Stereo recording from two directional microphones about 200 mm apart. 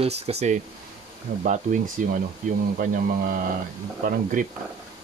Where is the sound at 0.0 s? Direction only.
35° right (ahead or behind).